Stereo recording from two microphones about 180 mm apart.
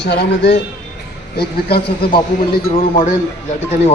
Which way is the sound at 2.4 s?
35° left (ahead or behind).